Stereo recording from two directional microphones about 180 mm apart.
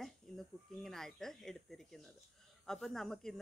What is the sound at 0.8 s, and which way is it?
Speech, centre (ahead or behind).